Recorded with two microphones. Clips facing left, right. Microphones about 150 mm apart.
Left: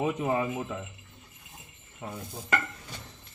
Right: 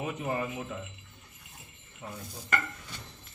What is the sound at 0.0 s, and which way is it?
Speech, 90° left.